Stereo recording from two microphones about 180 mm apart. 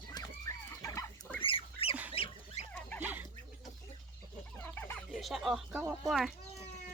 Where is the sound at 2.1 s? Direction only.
30° left (ahead or behind).